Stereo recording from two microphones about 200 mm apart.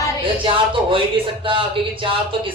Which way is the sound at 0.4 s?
25° right (ahead or behind).